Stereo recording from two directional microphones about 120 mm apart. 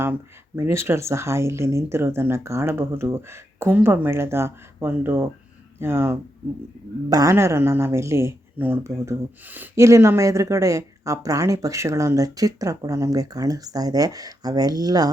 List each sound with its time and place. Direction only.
0.0 s speech: 20° right (ahead or behind)